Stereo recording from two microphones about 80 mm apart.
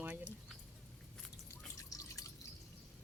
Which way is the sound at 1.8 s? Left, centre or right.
Left.